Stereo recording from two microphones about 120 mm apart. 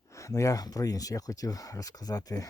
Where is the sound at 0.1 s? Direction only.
25° left (ahead or behind).